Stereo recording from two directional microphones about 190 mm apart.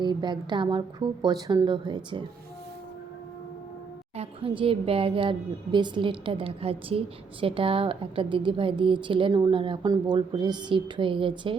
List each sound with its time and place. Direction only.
0.0 s a woman's voice: 25° right (ahead or behind)
4.2 s a woman's voice: 30° right (ahead or behind)